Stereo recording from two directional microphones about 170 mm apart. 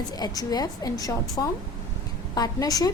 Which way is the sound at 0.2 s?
20° left (ahead or behind).